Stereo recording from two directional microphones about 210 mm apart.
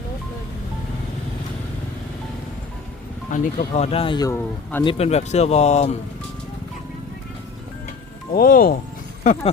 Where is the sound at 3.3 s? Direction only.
40° left (ahead or behind); by 4.8 s 10° left (ahead or behind).